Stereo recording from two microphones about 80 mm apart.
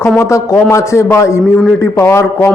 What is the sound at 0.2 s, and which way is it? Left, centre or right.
A man's voice, left.